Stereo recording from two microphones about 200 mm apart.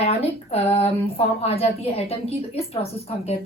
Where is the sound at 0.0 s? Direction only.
30° left (ahead or behind).